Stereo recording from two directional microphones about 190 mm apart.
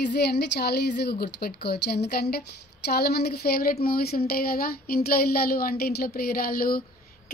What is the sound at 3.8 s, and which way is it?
Speech, 55° left (ahead or behind).